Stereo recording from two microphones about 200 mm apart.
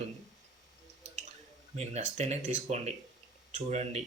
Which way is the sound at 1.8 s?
35° right (ahead or behind).